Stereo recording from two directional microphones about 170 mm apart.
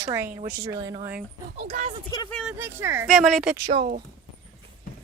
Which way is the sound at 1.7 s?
45° right (ahead or behind).